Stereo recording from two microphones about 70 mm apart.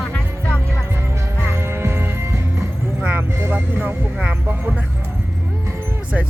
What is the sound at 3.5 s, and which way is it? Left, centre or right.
Speech, right.